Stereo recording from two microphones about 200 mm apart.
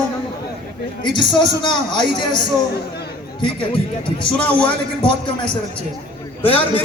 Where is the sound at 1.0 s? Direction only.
25° left (ahead or behind).